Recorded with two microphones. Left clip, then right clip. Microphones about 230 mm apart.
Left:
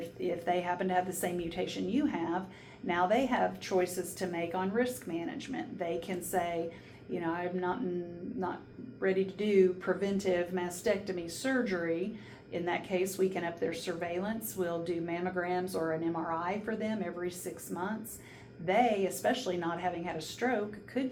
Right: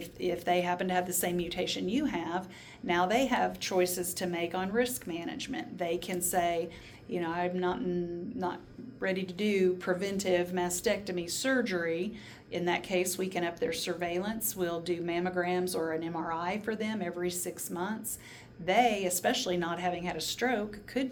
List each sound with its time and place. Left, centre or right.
0.2 s speech: right
9.0 s speech: right